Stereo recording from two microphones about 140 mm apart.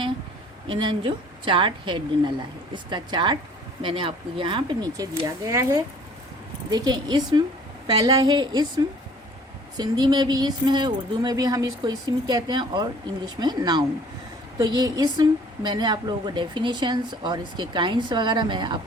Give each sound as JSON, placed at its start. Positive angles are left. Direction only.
{"t": 0.7, "sound": "a woman's voice", "side_deg": -35}